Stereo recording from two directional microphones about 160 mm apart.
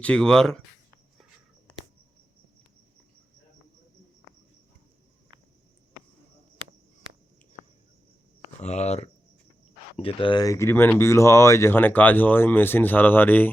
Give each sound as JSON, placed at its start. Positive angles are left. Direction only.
{"t": 0.0, "sound": "speech", "side_deg": 5}
{"t": 8.6, "sound": "speech", "side_deg": 45}
{"t": 10.0, "sound": "speech", "side_deg": 30}